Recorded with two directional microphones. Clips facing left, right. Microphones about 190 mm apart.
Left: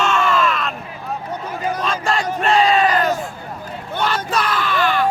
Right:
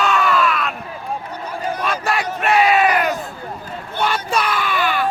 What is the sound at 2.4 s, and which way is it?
Crowd, 10° right (ahead or behind).